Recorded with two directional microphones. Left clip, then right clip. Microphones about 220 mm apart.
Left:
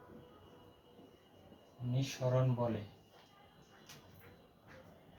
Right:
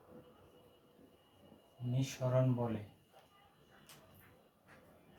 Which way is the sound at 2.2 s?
20° right (ahead or behind).